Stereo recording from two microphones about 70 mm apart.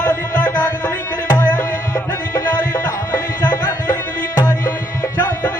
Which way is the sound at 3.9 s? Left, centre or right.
Left.